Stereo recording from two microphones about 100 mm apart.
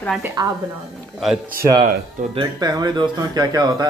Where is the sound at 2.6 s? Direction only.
40° right (ahead or behind).